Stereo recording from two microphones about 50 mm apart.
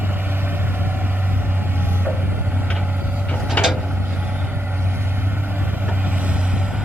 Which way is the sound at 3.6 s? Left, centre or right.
Left.